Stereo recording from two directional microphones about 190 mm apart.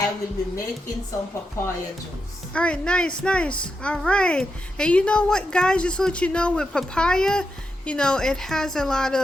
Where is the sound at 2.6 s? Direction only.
5° left (ahead or behind).